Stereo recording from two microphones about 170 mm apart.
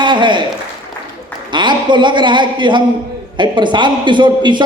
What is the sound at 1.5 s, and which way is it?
A man's voice, 25° right (ahead or behind).